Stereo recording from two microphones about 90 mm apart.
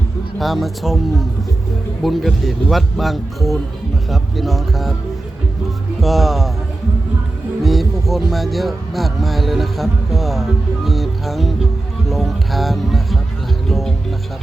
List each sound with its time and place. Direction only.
0.3 s speech: centre (ahead or behind)
6.0 s speech: centre (ahead or behind)
7.6 s a sound: centre (ahead or behind)
8.3 s speech: centre (ahead or behind)
13.7 s music: centre (ahead or behind)